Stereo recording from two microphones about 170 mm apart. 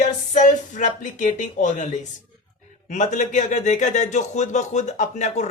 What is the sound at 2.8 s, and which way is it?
A man's voice, 45° left (ahead or behind).